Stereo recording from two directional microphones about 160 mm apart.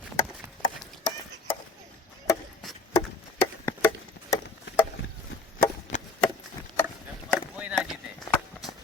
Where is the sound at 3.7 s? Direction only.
15° left (ahead or behind).